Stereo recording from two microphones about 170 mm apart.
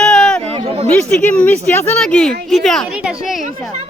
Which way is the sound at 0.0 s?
5° left (ahead or behind).